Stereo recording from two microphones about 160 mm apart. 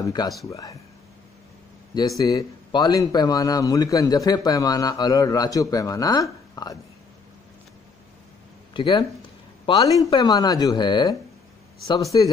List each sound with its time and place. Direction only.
0.0 s speech: 25° left (ahead or behind)
2.0 s speech: 20° left (ahead or behind)
8.7 s speech: 30° left (ahead or behind)